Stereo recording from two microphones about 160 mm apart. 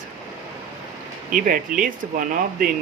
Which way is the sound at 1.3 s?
55° right (ahead or behind).